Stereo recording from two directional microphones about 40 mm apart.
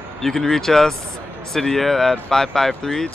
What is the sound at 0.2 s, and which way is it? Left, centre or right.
Speech, centre.